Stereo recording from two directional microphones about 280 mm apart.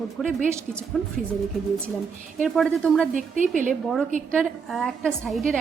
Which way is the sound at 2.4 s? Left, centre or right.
Centre.